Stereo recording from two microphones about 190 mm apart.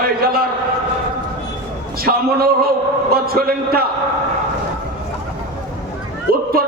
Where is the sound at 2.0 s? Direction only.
55° right (ahead or behind).